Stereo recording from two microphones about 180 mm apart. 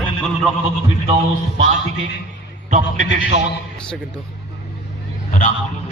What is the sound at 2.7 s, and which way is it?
Speech, 45° right (ahead or behind).